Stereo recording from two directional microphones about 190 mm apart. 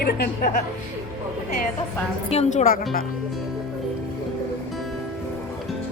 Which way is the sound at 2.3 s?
35° left (ahead or behind).